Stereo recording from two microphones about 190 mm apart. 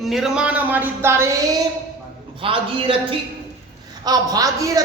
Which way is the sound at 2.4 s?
30° right (ahead or behind).